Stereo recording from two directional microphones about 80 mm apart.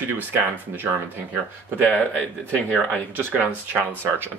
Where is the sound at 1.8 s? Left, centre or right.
Centre.